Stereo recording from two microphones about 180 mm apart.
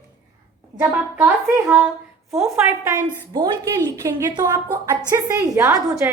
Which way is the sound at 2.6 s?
20° right (ahead or behind).